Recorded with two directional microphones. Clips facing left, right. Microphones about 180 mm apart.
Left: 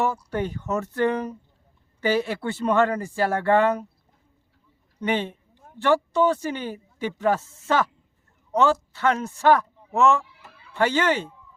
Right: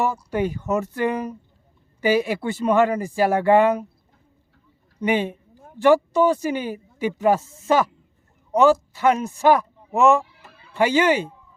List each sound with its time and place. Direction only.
0.0 s speech: 10° right (ahead or behind)
4.9 s a man's voice: 10° right (ahead or behind)